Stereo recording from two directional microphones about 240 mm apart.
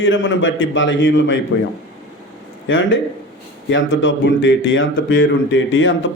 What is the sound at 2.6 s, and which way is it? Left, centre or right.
Speech, left.